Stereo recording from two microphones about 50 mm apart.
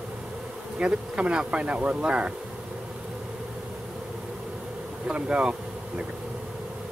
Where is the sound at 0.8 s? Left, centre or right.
Right.